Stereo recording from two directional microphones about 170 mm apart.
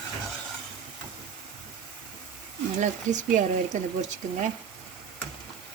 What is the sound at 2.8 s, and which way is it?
Speech, 50° right (ahead or behind).